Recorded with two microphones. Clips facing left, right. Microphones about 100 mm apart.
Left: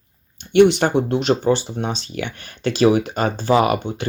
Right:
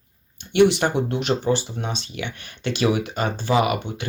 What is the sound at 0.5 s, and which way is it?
Speech, 35° left (ahead or behind).